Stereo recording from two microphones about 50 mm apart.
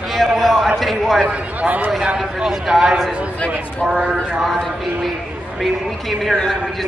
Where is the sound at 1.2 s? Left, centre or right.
Right.